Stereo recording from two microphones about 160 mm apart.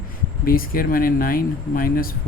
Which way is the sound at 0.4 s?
65° left (ahead or behind).